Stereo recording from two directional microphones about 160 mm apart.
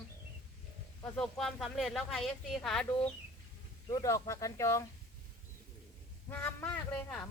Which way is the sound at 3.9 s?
20° left (ahead or behind).